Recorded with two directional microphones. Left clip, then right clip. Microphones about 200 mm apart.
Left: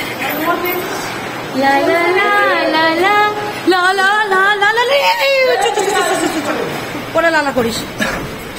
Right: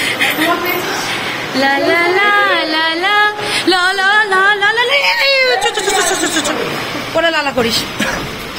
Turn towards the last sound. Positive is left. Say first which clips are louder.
# left 1 dB
turn(degrees=10)  # may be behind; listen again after turning